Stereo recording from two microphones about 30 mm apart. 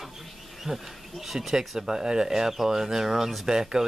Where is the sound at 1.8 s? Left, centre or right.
Centre.